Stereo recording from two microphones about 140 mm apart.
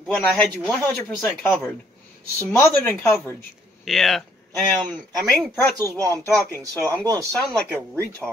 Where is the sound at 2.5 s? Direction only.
15° left (ahead or behind).